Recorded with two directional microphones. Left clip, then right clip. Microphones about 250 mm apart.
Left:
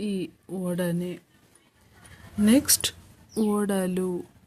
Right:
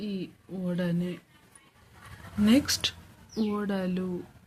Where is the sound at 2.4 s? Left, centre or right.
Left.